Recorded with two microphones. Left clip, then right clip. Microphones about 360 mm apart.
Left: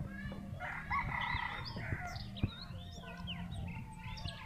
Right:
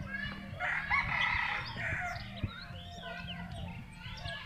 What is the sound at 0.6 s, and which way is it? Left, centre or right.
Chicken, right.